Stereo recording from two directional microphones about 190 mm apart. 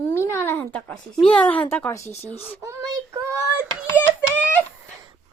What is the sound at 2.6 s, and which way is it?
Speech, 15° right (ahead or behind).